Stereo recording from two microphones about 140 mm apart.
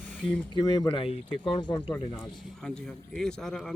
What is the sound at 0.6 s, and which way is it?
Speech, 30° left (ahead or behind).